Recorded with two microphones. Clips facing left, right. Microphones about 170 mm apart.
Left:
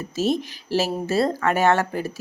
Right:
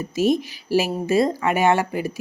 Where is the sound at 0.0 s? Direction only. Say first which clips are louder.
Right 3 dB; 10° right (ahead or behind).